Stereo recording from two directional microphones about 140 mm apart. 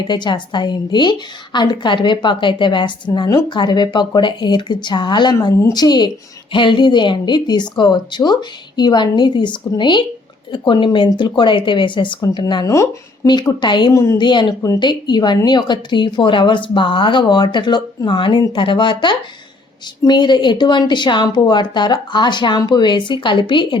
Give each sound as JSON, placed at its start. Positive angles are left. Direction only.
{"t": 0.1, "sound": "speech", "side_deg": 35}
{"t": 12.6, "sound": "speech", "side_deg": 20}
{"t": 13.9, "sound": "speech", "side_deg": 20}
{"t": 14.2, "sound": "speech", "side_deg": 35}